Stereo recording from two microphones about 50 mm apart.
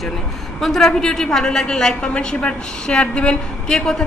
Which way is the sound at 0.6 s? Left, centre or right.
Centre.